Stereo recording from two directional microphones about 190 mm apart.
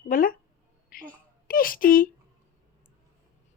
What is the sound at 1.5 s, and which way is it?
Speech, 50° left (ahead or behind).